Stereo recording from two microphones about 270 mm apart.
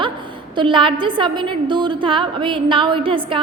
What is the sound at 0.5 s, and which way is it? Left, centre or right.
A woman's voice, centre.